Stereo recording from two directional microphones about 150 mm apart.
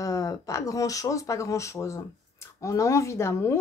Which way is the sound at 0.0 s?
20° left (ahead or behind).